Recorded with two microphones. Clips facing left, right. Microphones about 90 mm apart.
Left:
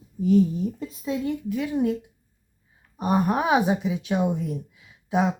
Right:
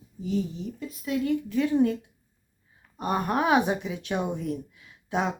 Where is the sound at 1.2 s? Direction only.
15° left (ahead or behind).